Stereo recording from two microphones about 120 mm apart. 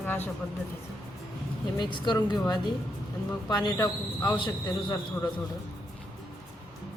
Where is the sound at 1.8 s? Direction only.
40° left (ahead or behind).